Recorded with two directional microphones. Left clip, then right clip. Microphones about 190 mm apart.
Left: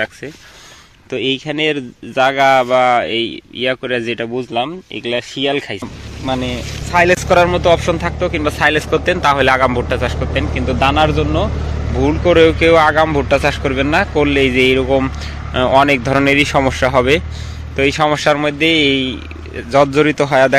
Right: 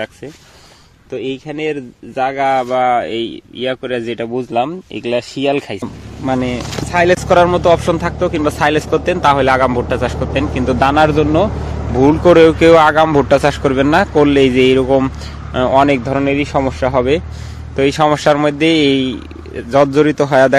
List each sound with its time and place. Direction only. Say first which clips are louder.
1.1 s speech: left 4 dB; 15° left (ahead or behind); by 4.4 s 10° right (ahead or behind)
4.4 s speech: right 2 dB; 30° right (ahead or behind)
6.9 s speech: even; 15° right (ahead or behind)
9.8 s speech: right 1 dB; 25° right (ahead or behind); by 17.2 s 5° right (ahead or behind)
17.7 s speech: right 1 dB; 25° right (ahead or behind)